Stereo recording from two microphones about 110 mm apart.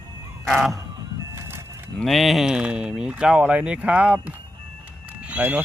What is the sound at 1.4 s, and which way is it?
Music, 25° right (ahead or behind).